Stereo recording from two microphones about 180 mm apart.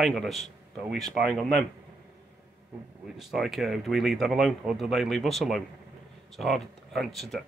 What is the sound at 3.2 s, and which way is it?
Speech, centre (ahead or behind).